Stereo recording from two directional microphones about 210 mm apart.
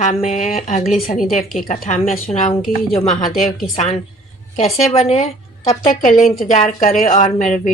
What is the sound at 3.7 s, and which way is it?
A woman's voice, 30° left (ahead or behind).